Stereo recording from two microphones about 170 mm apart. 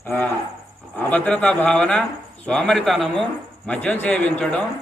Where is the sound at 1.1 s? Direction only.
10° left (ahead or behind).